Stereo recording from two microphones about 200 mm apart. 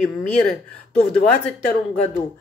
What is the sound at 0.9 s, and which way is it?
Speech, 5° left (ahead or behind).